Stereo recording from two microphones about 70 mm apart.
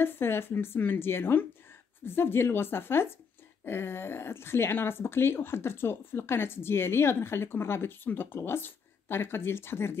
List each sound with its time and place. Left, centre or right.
0.0 s speech: left